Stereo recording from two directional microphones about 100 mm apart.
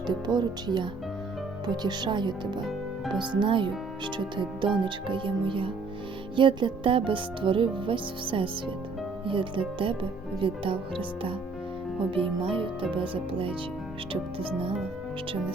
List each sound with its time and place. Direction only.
0.1 s speech: 45° right (ahead or behind)
4.8 s music: 55° right (ahead or behind)